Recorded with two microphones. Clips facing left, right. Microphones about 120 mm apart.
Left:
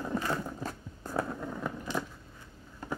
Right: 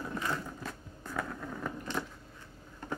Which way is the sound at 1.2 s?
10° left (ahead or behind).